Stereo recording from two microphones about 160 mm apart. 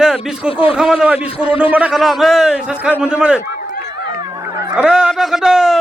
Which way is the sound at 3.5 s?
60° left (ahead or behind).